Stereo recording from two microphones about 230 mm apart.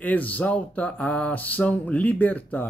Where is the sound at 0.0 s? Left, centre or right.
Centre.